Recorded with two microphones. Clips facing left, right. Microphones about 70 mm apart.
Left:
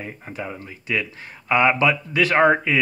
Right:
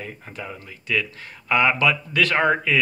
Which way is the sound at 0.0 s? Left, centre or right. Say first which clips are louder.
Left 3 dB; centre.